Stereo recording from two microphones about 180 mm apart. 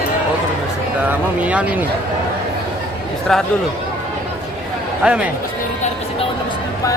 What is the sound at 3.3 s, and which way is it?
Speech, 5° left (ahead or behind).